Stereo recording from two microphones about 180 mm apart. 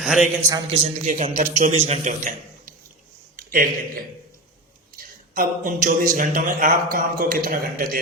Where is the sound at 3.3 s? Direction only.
55° right (ahead or behind).